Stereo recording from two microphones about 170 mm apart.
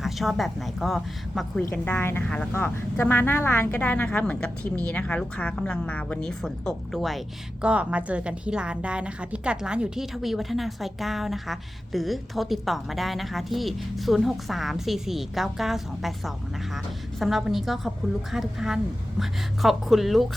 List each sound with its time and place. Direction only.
0.0 s a woman's voice: centre (ahead or behind)
1.7 s a woman's voice: 10° left (ahead or behind)